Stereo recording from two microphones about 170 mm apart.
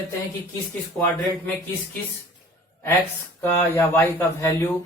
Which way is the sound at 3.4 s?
10° left (ahead or behind).